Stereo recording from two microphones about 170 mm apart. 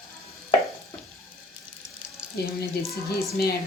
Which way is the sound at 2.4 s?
70° left (ahead or behind).